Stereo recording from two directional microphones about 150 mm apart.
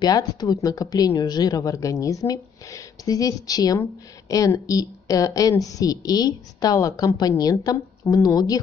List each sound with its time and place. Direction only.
0.0 s a woman's voice: 25° left (ahead or behind)